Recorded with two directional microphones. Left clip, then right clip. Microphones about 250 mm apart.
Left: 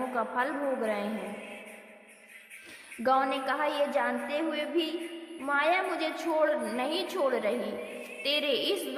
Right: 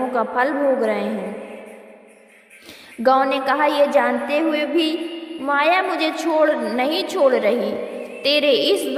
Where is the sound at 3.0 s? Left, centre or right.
Right.